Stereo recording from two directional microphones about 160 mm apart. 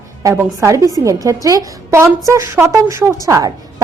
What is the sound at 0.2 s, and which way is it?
A woman's voice, 20° right (ahead or behind).